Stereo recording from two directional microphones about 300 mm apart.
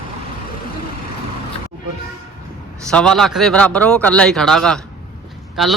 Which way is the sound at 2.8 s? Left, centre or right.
Centre.